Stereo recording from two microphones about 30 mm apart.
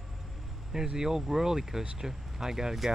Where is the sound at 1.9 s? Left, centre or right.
Centre.